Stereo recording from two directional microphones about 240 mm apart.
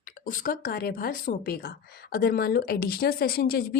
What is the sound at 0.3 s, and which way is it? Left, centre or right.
Speech, left.